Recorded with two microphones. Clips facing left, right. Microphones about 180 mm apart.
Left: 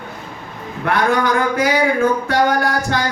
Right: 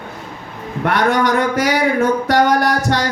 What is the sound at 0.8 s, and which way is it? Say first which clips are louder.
Speech: right 1 dB; 70° right (ahead or behind).